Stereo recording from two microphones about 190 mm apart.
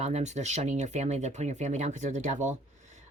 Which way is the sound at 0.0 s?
35° right (ahead or behind).